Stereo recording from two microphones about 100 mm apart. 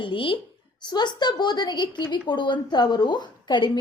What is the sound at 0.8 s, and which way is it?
A woman's voice, 45° left (ahead or behind).